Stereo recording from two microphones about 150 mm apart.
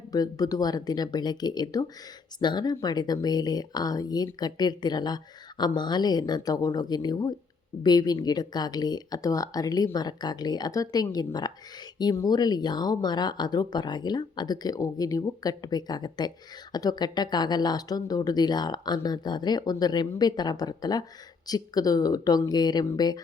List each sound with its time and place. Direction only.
0.1 s speech: 25° left (ahead or behind)